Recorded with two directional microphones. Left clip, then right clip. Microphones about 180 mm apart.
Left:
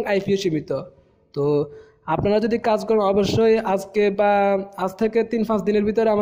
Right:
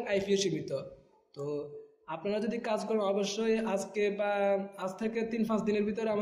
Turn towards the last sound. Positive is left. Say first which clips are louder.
# left 12 dB
turn(degrees=50)  # may be behind; listen again after turning